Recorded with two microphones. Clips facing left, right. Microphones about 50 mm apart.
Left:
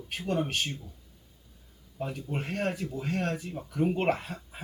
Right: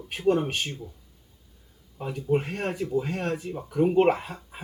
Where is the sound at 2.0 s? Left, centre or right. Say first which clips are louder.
Right 8 dB; centre.